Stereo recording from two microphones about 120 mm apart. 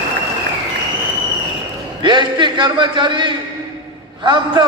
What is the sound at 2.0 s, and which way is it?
A man's voice, 40° right (ahead or behind).